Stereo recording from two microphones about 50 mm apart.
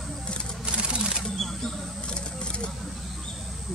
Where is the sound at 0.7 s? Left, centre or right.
Centre.